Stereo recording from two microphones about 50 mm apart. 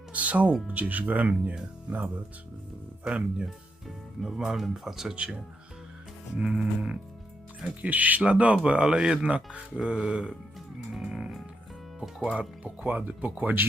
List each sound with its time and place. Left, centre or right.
0.1 s music: right
0.7 s speech: right
3.0 s speech: right
3.4 s speech: centre
5.1 s speech: right
7.8 s speech: right; by 10.3 s centre
10.9 s music: centre
12.2 s speech: right
12.8 s speech: right